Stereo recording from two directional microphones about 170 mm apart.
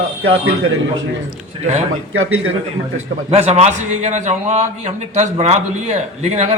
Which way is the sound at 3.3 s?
40° right (ahead or behind).